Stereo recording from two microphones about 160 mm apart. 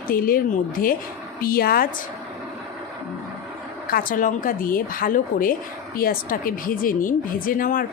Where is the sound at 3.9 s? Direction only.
60° left (ahead or behind).